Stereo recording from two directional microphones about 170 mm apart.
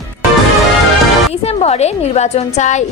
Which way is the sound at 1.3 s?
35° left (ahead or behind).